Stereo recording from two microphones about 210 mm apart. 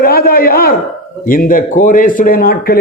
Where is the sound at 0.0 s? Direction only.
45° left (ahead or behind).